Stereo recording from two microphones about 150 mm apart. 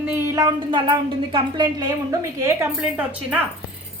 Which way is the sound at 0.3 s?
25° right (ahead or behind).